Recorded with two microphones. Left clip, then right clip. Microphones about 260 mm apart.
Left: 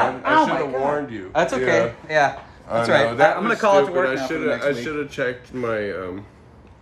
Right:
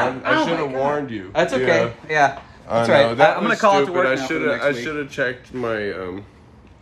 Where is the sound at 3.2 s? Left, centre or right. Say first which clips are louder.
Right 2 dB; centre.